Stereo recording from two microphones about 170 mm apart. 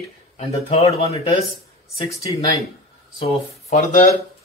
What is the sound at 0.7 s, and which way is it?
Speech, 35° left (ahead or behind).